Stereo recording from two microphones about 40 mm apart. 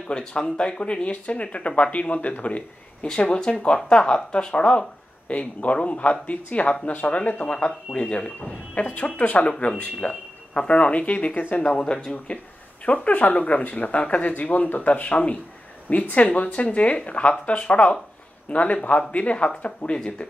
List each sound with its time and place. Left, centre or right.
0.1 s speech: left
3.6 s speech: left
7.4 s speech: left
8.7 s speech: left
11.8 s speech: centre
12.3 s speech: left